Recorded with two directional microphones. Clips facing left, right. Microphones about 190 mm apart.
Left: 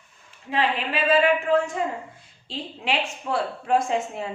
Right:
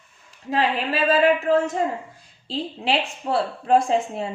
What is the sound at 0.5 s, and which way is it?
A woman's voice, 40° right (ahead or behind).